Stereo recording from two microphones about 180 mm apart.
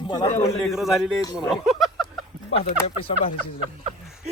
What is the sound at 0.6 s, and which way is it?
Speech, centre (ahead or behind).